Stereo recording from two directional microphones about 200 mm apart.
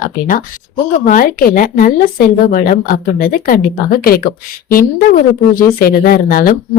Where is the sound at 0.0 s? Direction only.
45° left (ahead or behind).